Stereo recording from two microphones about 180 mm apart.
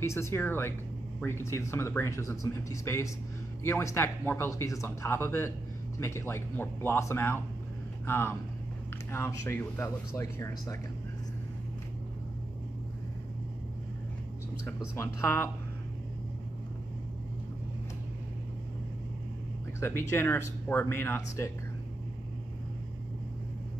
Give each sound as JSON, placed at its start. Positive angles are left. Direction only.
{"t": 0.0, "sound": "speech", "side_deg": 15}
{"t": 14.7, "sound": "speech", "side_deg": 15}
{"t": 20.0, "sound": "speech", "side_deg": 15}